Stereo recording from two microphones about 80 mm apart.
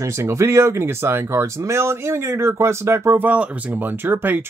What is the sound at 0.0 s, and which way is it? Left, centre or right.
Speech, right.